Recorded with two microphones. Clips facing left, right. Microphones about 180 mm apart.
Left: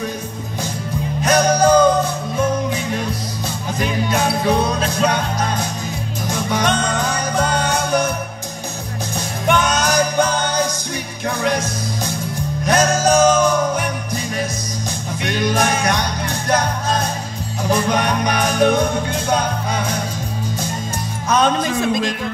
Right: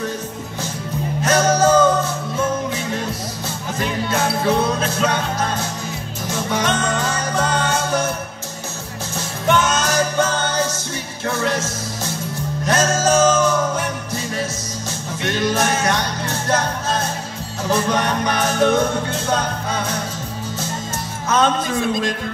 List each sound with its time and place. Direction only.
1.2 s music: 15° left (ahead or behind)
9.1 s music: 15° left (ahead or behind)
21.3 s music: 15° left (ahead or behind)